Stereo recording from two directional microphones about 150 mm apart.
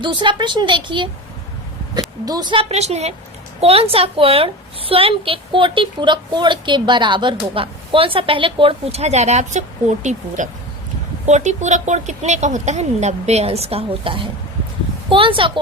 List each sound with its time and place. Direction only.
0.0 s a woman's voice: 30° right (ahead or behind)